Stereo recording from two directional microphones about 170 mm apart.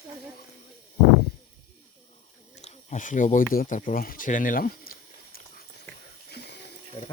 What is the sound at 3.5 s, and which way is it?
Speech, 55° left (ahead or behind).